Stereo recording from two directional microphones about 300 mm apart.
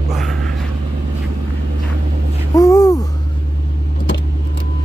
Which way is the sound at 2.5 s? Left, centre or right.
Centre.